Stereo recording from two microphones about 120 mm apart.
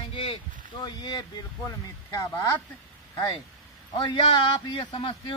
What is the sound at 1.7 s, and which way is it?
Speech, 25° left (ahead or behind).